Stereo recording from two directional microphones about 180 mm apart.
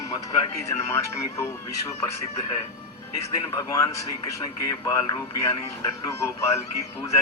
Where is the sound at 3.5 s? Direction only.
20° left (ahead or behind).